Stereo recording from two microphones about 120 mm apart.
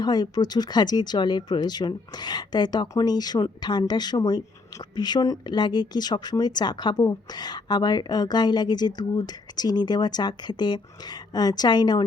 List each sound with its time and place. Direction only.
0.0 s speech: 35° left (ahead or behind)